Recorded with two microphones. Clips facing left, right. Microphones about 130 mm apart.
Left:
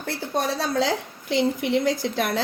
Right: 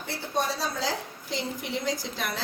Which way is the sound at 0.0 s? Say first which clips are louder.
Left 4 dB; 75° left (ahead or behind).